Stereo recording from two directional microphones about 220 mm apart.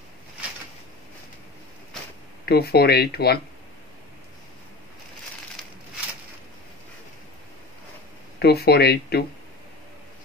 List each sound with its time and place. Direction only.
2.4 s speech: 45° left (ahead or behind)
8.4 s speech: 45° left (ahead or behind)